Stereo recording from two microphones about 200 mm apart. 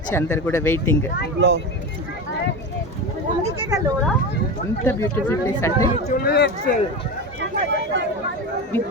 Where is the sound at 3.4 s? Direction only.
25° right (ahead or behind).